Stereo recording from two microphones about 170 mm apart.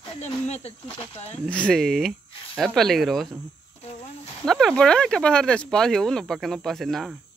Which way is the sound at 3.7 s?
40° left (ahead or behind).